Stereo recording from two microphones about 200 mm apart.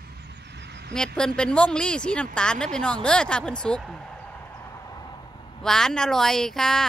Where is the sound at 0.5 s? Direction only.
55° right (ahead or behind).